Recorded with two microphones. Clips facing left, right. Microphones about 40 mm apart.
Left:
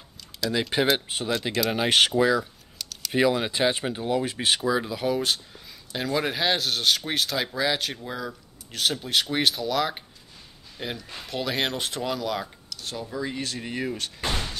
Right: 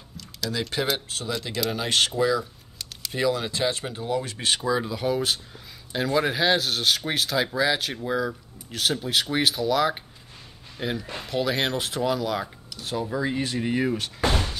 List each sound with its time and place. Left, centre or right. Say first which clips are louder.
0.5 s speech: left 3 dB; left; by 12.4 s centre
12.6 s a sound: right 5 dB; centre
13.0 s speech: right 4 dB; centre